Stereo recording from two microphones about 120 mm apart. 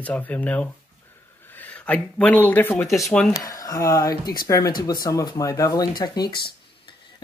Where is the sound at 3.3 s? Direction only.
30° left (ahead or behind).